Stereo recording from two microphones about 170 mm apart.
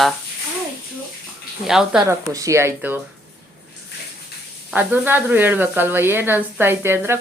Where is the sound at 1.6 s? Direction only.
5° right (ahead or behind).